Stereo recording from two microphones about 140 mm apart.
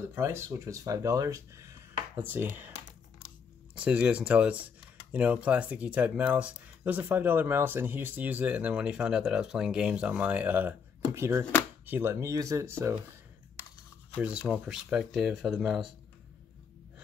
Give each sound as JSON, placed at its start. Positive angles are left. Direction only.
{"t": 0.1, "sound": "speech", "side_deg": -20}
{"t": 3.7, "sound": "speech", "side_deg": -10}
{"t": 14.2, "sound": "speech", "side_deg": -10}